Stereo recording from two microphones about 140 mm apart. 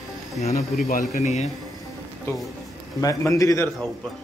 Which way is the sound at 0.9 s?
65° left (ahead or behind).